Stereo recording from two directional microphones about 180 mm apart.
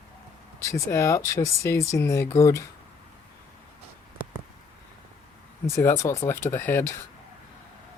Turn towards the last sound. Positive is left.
turn(degrees=10)  # may be behind; listen again after turning